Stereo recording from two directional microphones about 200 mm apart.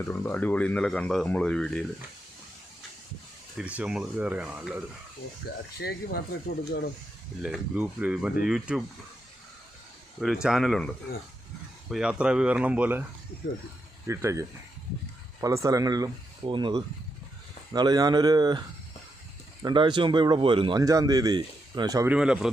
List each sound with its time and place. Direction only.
0.1 s speech: 10° left (ahead or behind)
3.6 s speech: 5° right (ahead or behind)
5.7 s speech: 50° left (ahead or behind)
7.4 s speech: 5° right (ahead or behind)
10.4 s speech: centre (ahead or behind)
14.1 s speech: 15° right (ahead or behind)
19.6 s speech: 25° right (ahead or behind)
22.1 s speech: 5° right (ahead or behind)